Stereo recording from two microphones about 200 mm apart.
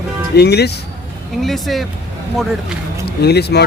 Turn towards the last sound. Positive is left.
turn(degrees=55)  # may be behind; listen again after turning